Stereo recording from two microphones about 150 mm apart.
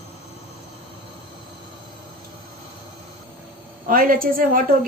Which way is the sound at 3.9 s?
70° right (ahead or behind).